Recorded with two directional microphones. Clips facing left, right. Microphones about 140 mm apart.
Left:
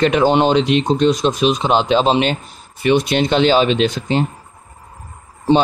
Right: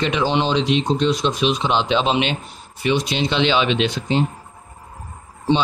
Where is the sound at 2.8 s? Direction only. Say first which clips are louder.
Left 5 dB; 55° left (ahead or behind).